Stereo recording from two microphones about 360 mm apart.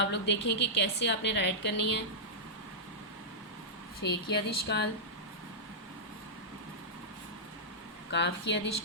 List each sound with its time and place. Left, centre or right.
0.0 s a woman's voice: left
4.4 s a woman's voice: left
8.1 s a woman's voice: left